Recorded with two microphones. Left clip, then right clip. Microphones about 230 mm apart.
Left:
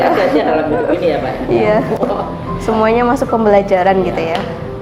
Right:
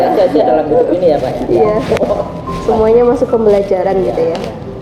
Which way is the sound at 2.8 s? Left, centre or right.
Left.